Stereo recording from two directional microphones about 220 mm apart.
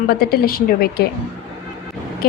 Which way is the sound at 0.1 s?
45° left (ahead or behind).